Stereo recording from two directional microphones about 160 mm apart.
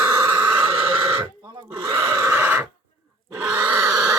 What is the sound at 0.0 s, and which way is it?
Neigh, 15° right (ahead or behind).